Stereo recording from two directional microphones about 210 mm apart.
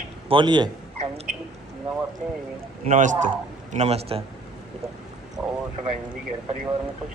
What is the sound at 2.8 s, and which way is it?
A man's voice, 35° right (ahead or behind).